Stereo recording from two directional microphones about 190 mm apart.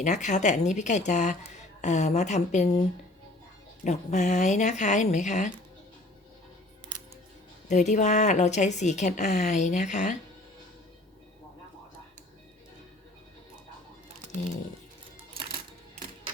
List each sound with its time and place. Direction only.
0.0 s speech: 40° left (ahead or behind)
3.8 s speech: 40° left (ahead or behind)
7.7 s speech: 40° left (ahead or behind)